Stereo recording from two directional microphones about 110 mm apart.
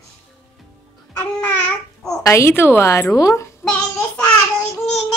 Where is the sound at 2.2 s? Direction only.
25° left (ahead or behind).